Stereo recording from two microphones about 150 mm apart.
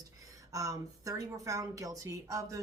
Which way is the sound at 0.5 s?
20° right (ahead or behind).